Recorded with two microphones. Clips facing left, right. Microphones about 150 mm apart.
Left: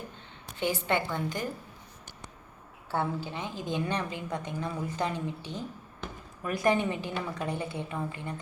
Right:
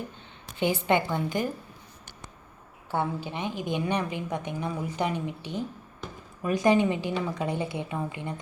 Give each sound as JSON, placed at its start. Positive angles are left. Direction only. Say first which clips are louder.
{"t": 0.6, "sound": "a woman's voice", "louder": "right 4 dB", "side_deg": -15}
{"t": 2.9, "sound": "a woman's voice", "louder": "right 2 dB", "side_deg": -15}